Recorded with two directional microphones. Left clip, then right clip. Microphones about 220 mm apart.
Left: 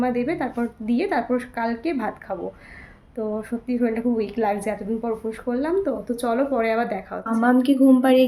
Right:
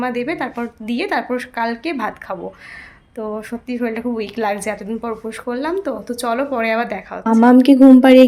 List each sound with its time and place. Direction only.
0.0 s speech: centre (ahead or behind)
7.4 s speech: 35° right (ahead or behind)